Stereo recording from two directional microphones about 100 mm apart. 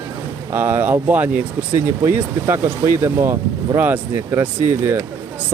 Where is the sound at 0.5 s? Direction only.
20° right (ahead or behind).